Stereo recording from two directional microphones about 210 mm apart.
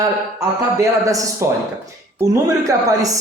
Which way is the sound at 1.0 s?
15° right (ahead or behind).